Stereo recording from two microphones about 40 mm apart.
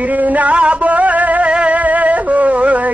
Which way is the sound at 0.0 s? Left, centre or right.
Right.